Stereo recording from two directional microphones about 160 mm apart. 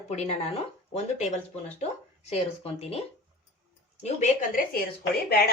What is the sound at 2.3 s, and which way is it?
A woman's voice, 40° left (ahead or behind).